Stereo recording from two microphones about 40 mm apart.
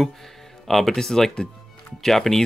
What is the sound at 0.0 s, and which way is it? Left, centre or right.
Speech, centre.